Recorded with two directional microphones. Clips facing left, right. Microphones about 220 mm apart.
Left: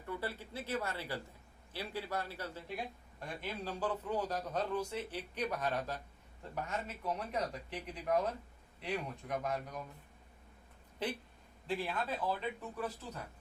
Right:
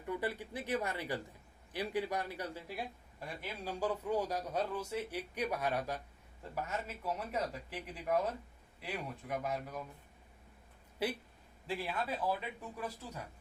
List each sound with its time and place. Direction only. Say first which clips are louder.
0.0 s a man's voice: right 3 dB; 15° right (ahead or behind)
11.0 s a man's voice: right 2 dB; 10° right (ahead or behind)